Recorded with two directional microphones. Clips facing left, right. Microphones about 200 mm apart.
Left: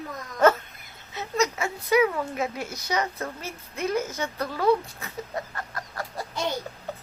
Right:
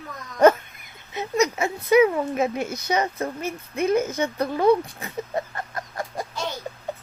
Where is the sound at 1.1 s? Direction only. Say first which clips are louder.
Right 4 dB; 15° right (ahead or behind).